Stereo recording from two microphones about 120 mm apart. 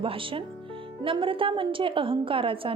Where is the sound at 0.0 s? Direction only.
50° right (ahead or behind).